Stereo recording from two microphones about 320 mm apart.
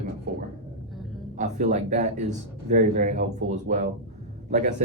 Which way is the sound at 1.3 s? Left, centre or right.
Right.